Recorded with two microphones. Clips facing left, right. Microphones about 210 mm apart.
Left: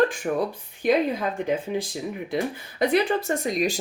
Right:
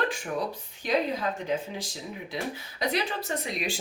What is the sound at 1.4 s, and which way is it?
Speech, 55° left (ahead or behind).